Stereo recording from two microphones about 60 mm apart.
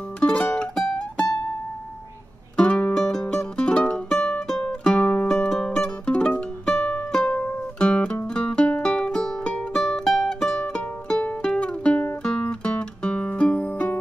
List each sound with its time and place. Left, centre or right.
0.2 s music: centre
2.5 s music: centre
5.3 s music: centre
7.1 s music: centre